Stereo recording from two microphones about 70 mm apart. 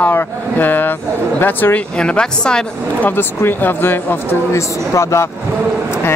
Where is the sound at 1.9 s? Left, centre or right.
Centre.